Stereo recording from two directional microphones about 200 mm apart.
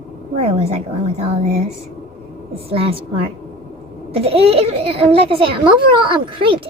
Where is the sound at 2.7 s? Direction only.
30° right (ahead or behind).